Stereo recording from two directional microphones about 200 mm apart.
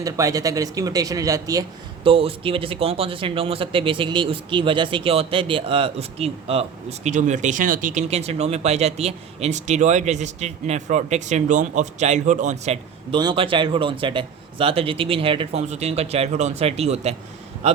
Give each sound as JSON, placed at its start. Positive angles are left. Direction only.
{"t": 0.0, "sound": "speech", "side_deg": -15}
{"t": 2.0, "sound": "speech", "side_deg": -25}